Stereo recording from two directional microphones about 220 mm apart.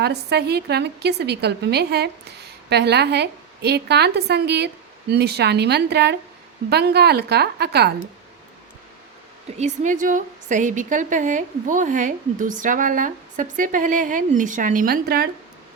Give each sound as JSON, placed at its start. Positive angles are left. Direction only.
{"t": 0.0, "sound": "a woman's voice", "side_deg": -50}
{"t": 9.6, "sound": "a woman's voice", "side_deg": -35}